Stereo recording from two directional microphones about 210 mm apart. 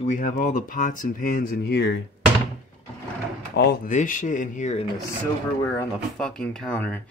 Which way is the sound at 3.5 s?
50° left (ahead or behind).